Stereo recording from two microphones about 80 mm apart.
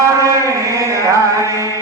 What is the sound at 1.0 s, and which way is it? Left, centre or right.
Music, right.